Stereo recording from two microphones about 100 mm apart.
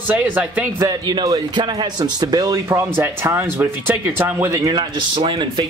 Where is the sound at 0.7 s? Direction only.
40° right (ahead or behind).